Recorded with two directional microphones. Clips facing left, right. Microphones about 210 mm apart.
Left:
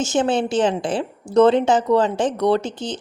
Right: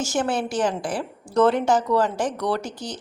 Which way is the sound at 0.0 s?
20° left (ahead or behind).